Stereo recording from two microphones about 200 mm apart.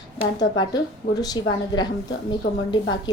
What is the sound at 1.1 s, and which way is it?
A woman's voice, 20° left (ahead or behind).